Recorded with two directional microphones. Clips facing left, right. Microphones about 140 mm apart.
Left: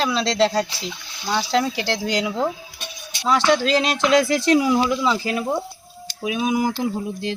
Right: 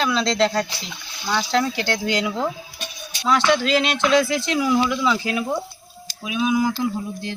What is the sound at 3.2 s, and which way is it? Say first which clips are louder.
Speech: left 1 dB; 35° left (ahead or behind).